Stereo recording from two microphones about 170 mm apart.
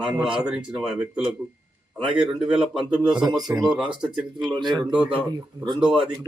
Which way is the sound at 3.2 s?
25° right (ahead or behind).